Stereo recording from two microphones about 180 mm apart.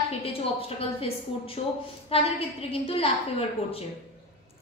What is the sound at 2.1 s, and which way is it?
Speech, 30° left (ahead or behind).